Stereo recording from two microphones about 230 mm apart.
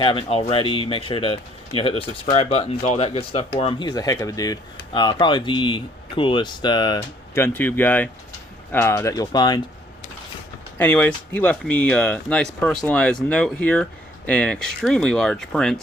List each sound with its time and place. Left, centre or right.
0.0 s speech: left
10.8 s speech: centre